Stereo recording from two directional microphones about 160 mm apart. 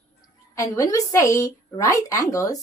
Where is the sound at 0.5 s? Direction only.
20° left (ahead or behind).